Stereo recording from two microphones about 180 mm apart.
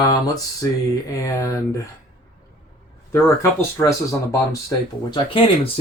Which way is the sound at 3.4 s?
15° left (ahead or behind).